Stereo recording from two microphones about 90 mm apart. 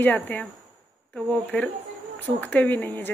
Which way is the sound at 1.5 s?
10° left (ahead or behind).